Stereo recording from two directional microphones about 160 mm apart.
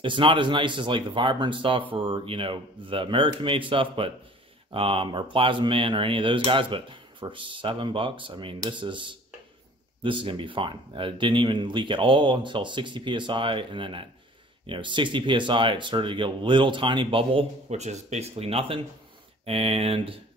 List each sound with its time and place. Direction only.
0.0 s speech: 30° right (ahead or behind)